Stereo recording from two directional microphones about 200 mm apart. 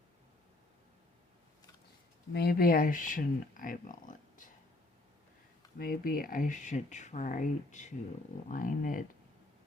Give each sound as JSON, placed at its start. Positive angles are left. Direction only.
{"t": 2.3, "sound": "speech", "side_deg": 50}
{"t": 5.8, "sound": "speech", "side_deg": 45}